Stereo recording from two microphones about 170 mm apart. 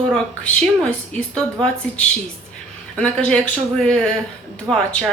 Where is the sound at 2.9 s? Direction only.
5° left (ahead or behind).